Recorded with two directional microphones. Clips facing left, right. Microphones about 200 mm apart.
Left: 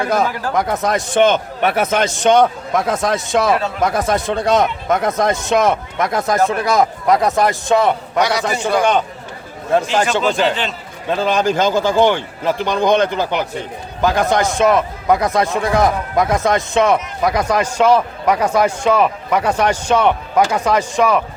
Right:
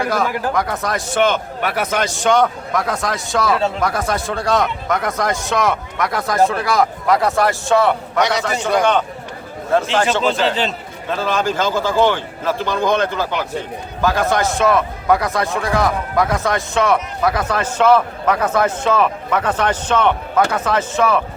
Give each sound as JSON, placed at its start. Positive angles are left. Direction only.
{"t": 0.0, "sound": "a man's voice", "side_deg": 20}
{"t": 8.2, "sound": "a man's voice", "side_deg": -20}
{"t": 8.8, "sound": "speech", "side_deg": 15}
{"t": 10.4, "sound": "a man's voice", "side_deg": -35}
{"t": 11.1, "sound": "speech", "side_deg": 15}